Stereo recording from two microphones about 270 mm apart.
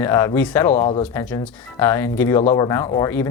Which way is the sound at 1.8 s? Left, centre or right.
Centre.